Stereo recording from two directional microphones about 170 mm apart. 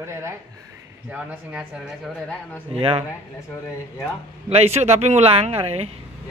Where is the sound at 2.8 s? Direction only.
35° right (ahead or behind).